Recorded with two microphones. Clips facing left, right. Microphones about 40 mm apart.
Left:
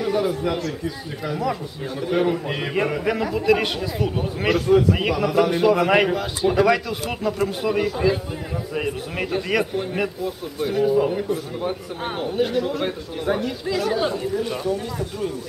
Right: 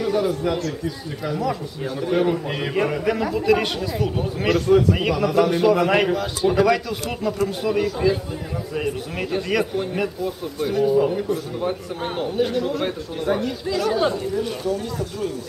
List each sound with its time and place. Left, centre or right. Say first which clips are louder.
0.0 s speech: right 1 dB; centre